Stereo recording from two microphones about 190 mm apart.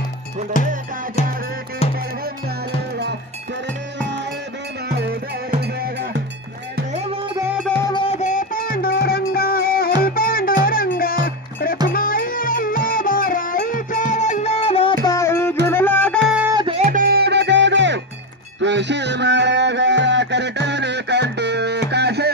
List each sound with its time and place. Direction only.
0.5 s music: 45° left (ahead or behind)
4.8 s music: 55° right (ahead or behind)
6.9 s music: 35° right (ahead or behind)
7.3 s music: 10° right (ahead or behind)
7.8 s music: 25° left (ahead or behind)
8.2 s music: 40° left (ahead or behind)
15.0 s music: 15° left (ahead or behind)
16.3 s music: 5° right (ahead or behind)
16.5 s music: 30° right (ahead or behind)
16.8 s music: 50° right (ahead or behind)